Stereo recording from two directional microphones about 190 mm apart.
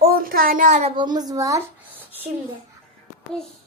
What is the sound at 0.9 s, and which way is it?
A woman's voice, 20° right (ahead or behind).